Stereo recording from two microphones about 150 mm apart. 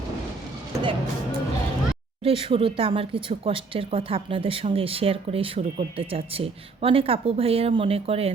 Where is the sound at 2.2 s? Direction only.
40° right (ahead or behind).